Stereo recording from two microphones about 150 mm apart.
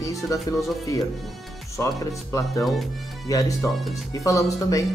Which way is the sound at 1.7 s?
20° left (ahead or behind).